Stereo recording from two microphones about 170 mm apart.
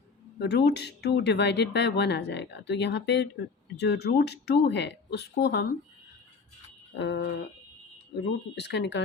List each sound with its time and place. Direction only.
0.3 s speech: 80° left
6.9 s speech: 90° left